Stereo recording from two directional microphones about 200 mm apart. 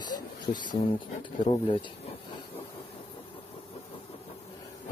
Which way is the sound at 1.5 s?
25° left (ahead or behind).